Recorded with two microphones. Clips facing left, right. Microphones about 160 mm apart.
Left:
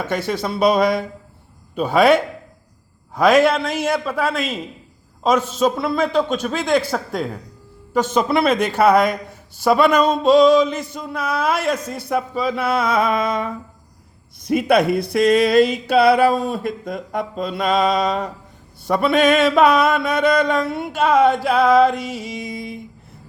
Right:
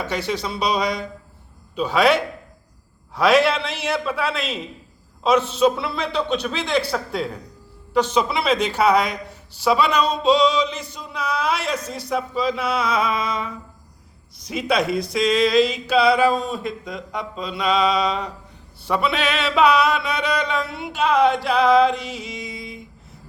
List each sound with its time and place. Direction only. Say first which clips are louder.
0.0 s a man's voice: left 3 dB; 50° left (ahead or behind)
14.3 s a sound: left 6 dB; 55° left (ahead or behind)
18.9 s a man's voice: left 6 dB; 50° left (ahead or behind)